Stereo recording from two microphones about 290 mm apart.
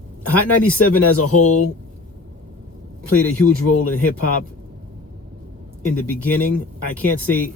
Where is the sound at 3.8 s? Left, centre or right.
Left.